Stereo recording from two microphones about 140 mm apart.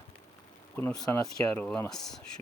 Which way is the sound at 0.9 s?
25° left (ahead or behind).